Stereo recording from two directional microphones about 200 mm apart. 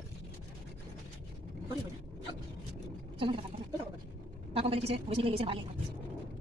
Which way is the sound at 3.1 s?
25° right (ahead or behind).